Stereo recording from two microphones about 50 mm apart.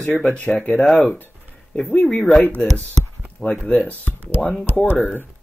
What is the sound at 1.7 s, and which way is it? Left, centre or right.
Speech, centre.